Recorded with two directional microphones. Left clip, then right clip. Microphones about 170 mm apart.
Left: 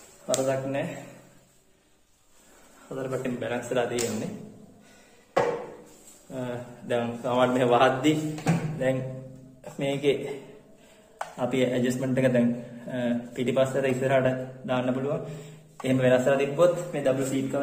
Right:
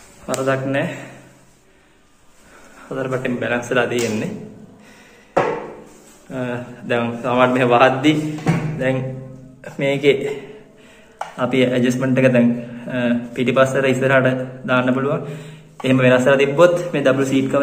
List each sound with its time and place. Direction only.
0.5 s a man's voice: 10° left (ahead or behind)
2.9 s a man's voice: 15° left (ahead or behind)
6.3 s a man's voice: 15° left (ahead or behind)
11.1 s a man's voice: 15° left (ahead or behind); by 17.6 s 5° right (ahead or behind)